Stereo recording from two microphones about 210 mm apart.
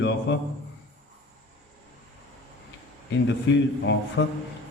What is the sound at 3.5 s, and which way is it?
Speech, 60° left (ahead or behind).